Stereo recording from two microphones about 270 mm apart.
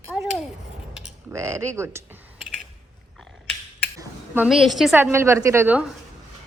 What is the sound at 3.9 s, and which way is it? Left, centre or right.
A woman's voice, centre.